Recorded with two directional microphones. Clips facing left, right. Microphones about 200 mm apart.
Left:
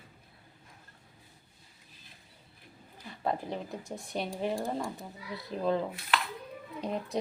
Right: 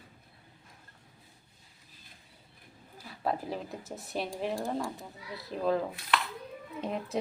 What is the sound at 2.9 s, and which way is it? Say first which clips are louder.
Speech: even; centre (ahead or behind).